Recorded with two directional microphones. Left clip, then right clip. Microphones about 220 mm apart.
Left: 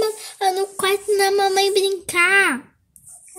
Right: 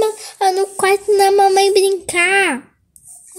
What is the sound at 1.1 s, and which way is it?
A child's voice, 5° left (ahead or behind).